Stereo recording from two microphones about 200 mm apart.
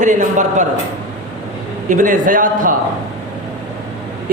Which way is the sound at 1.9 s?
40° right (ahead or behind).